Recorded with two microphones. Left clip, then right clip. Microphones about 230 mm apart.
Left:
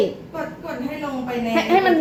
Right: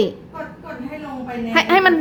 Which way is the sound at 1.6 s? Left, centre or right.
Right.